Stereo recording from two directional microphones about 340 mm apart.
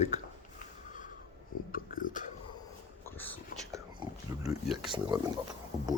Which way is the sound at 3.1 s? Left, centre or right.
Centre.